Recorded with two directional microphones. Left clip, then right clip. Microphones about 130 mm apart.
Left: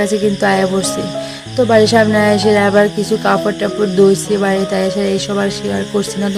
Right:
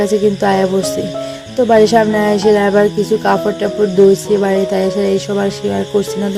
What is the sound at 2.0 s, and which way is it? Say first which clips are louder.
Speech: left 1 dB; 15° right (ahead or behind).